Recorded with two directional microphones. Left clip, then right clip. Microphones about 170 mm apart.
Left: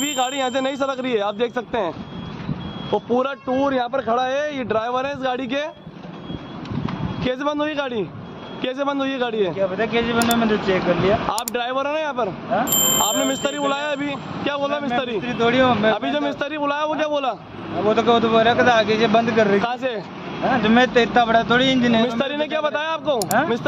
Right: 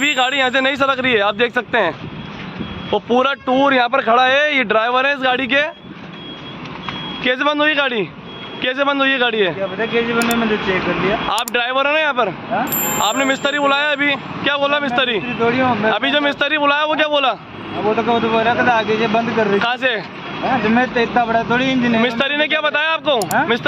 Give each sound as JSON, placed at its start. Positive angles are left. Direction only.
{"t": 0.0, "sound": "a man's voice", "side_deg": 5}
{"t": 4.6, "sound": "a man's voice", "side_deg": -5}
{"t": 7.2, "sound": "a man's voice", "side_deg": 0}
{"t": 9.6, "sound": "speech", "side_deg": 30}
{"t": 10.1, "sound": "a man's voice", "side_deg": 0}
{"t": 15.4, "sound": "speech", "side_deg": 30}
{"t": 15.9, "sound": "a man's voice", "side_deg": 0}
{"t": 17.8, "sound": "speech", "side_deg": 35}
{"t": 19.6, "sound": "a man's voice", "side_deg": 5}
{"t": 20.4, "sound": "speech", "side_deg": 25}
{"t": 22.0, "sound": "a man's voice", "side_deg": 0}